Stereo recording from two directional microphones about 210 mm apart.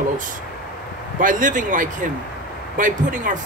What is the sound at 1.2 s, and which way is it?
A woman's voice, 40° right (ahead or behind).